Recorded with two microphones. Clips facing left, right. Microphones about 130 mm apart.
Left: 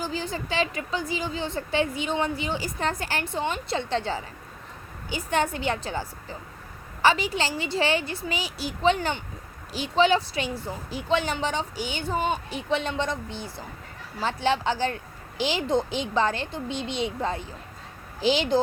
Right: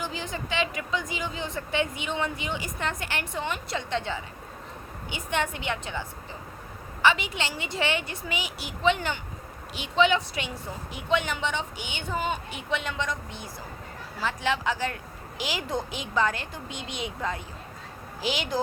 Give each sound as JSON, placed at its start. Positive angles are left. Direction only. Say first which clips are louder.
{"t": 0.0, "sound": "a woman's voice", "louder": "left 3 dB", "side_deg": 35}